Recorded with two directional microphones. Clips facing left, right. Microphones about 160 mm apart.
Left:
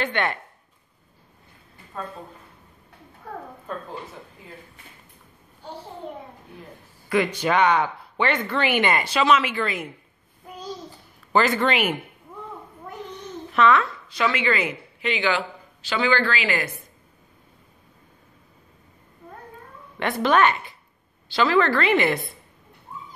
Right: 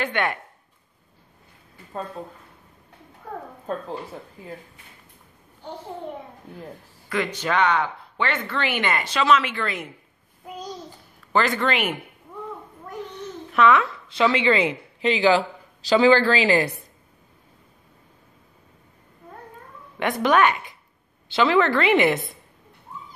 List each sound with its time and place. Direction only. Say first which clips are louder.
0.0 s a woman's voice: even; 10° right (ahead or behind)
7.1 s speech: left 3 dB; 10° left (ahead or behind)
11.3 s speech: left 2 dB; 5° left (ahead or behind)
13.6 s a woman's voice: right 1 dB; 10° right (ahead or behind)
14.0 s a woman's voice: right 4 dB; 25° right (ahead or behind)
20.0 s a woman's voice: even; 15° right (ahead or behind)